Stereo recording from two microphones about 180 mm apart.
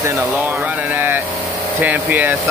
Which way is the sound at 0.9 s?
10° right (ahead or behind).